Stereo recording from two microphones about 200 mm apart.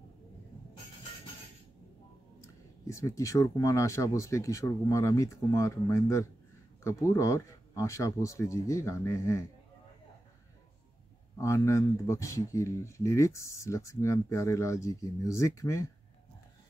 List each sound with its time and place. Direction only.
2.9 s speech: 15° left (ahead or behind)
11.3 s speech: 15° left (ahead or behind)